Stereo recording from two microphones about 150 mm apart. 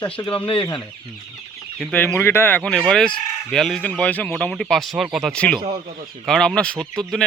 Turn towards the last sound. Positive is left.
turn(degrees=5)  # may be behind; listen again after turning